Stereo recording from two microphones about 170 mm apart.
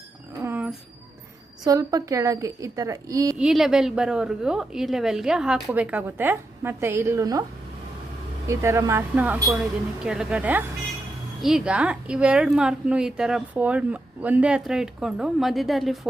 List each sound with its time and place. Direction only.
0.4 s jingle bell: 10° right (ahead or behind)
1.6 s a woman's voice: 20° right (ahead or behind)
3.3 s a woman's voice: 5° right (ahead or behind); by 7.4 s 20° right (ahead or behind)
8.4 s a woman's voice: 15° right (ahead or behind); by 16.0 s centre (ahead or behind)